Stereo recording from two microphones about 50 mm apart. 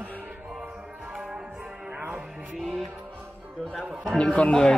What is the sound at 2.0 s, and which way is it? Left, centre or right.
Music, right.